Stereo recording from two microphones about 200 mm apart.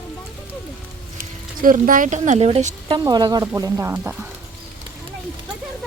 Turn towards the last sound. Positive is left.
turn(degrees=-10)  # may be behind; listen again after turning